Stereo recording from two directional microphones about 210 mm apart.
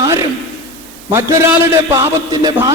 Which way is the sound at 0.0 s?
15° right (ahead or behind).